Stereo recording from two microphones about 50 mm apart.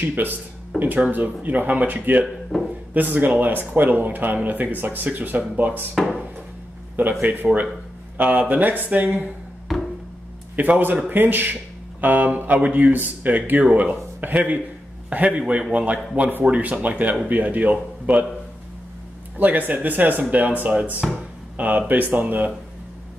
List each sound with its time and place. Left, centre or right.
0.0 s speech: right
2.5 s speech: centre
2.9 s speech: right
7.0 s speech: right
9.7 s a sound: centre
10.5 s a man's voice: right
19.3 s speech: right